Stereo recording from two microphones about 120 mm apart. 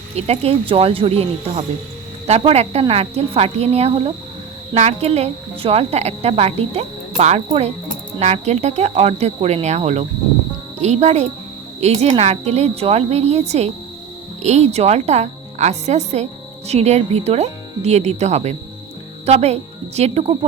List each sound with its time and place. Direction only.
0.2 s a woman's voice: 60° right (ahead or behind)